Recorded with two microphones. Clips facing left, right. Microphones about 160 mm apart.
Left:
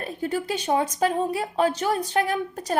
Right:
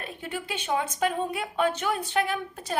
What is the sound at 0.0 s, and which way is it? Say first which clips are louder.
A woman's voice: left 8 dB; 40° left (ahead or behind).